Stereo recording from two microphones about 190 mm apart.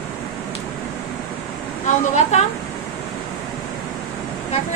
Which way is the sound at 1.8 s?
40° left (ahead or behind).